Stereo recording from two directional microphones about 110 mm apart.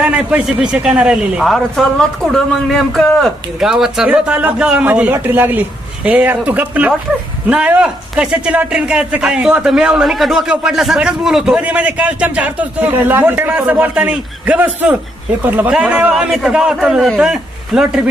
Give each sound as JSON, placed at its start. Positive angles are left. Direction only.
{"t": 0.0, "sound": "a man's voice", "side_deg": -10}